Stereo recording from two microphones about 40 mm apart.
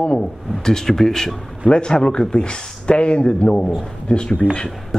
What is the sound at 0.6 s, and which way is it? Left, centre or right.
Speech, centre.